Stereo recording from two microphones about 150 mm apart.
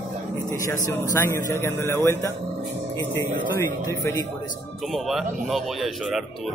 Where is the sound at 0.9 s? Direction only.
15° left (ahead or behind).